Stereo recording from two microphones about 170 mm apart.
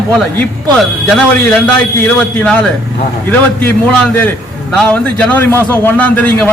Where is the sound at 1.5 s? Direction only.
10° left (ahead or behind).